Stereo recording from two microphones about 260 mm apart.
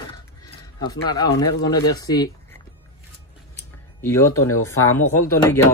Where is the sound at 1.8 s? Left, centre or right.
Centre.